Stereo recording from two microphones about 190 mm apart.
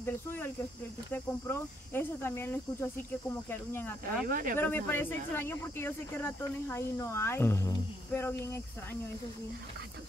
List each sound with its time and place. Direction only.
0.0 s speech: 10° left (ahead or behind)
4.3 s speech: 45° right (ahead or behind)
4.6 s speech: 10° left (ahead or behind)